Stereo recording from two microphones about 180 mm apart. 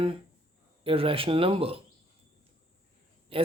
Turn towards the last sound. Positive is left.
turn(degrees=-30)  # may be behind; listen again after turning